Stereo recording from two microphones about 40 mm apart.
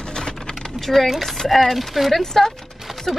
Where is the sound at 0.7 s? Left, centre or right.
Centre.